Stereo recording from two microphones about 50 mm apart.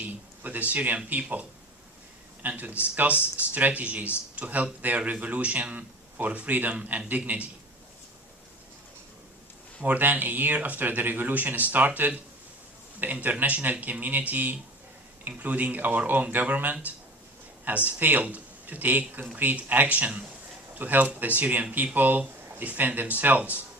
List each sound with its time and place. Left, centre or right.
0.4 s speech: right
9.8 s speech: right